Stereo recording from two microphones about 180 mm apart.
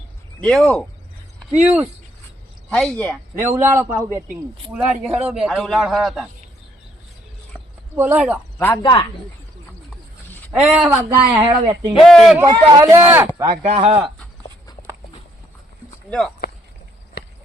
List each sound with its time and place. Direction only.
0.4 s speech: 5° left (ahead or behind)
1.6 s speech: 15° right (ahead or behind)
2.6 s a man's voice: 5° left (ahead or behind)
3.3 s a man's voice: 15° right (ahead or behind)
7.9 s speech: 10° right (ahead or behind)
8.5 s speech: 15° left (ahead or behind)
8.8 s speech: 25° left (ahead or behind)
10.5 s speech: 5° right (ahead or behind)
11.3 s speech: 25° right (ahead or behind)
11.9 s a man's voice: centre (ahead or behind)
12.4 s speech: 20° right (ahead or behind)
13.6 s speech: 40° right (ahead or behind)
13.8 s speech: 30° right (ahead or behind)
16.0 s speech: 5° left (ahead or behind)